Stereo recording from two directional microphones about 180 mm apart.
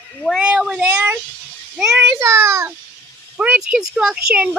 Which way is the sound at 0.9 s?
10° right (ahead or behind).